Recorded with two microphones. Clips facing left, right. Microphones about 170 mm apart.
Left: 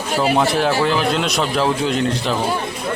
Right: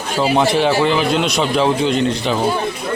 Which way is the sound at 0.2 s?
Centre (ahead or behind).